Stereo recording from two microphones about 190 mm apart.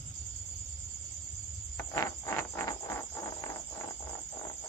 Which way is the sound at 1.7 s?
15° left (ahead or behind).